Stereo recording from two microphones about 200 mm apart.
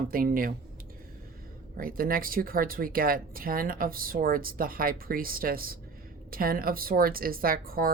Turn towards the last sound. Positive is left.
turn(degrees=-45)  # may be behind; listen again after turning